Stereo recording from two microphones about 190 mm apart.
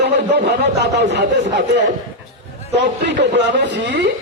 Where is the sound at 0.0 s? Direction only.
65° right (ahead or behind).